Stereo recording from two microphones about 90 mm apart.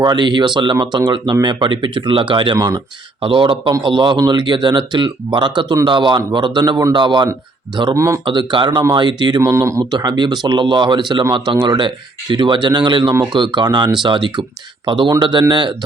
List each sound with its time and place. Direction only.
0.0 s speech: 50° right (ahead or behind)
2.6 s speech: 45° right (ahead or behind)
3.2 s speech: 75° right (ahead or behind)
3.7 s speech: 60° right (ahead or behind)
4.2 s speech: 50° right (ahead or behind)
7.0 s speech: 60° right (ahead or behind)
7.9 s speech: 35° right (ahead or behind)
8.3 s speech: 60° right (ahead or behind)
9.4 s speech: 35° right (ahead or behind)
9.9 s speech: 50° right (ahead or behind)